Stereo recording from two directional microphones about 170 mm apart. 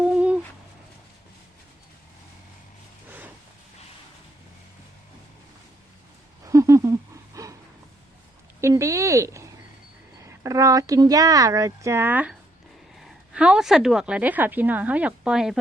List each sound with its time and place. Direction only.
0.0 s owl: 5° right (ahead or behind)
3.1 s vehicle: 10° right (ahead or behind)
6.4 s a sound: 20° right (ahead or behind)
8.6 s a woman's voice: 20° right (ahead or behind)